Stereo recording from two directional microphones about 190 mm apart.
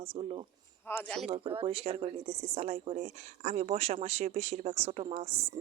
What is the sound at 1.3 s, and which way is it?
Speech, 30° right (ahead or behind).